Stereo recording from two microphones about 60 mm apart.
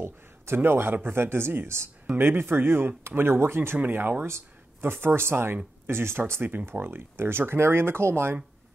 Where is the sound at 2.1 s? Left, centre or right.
Right.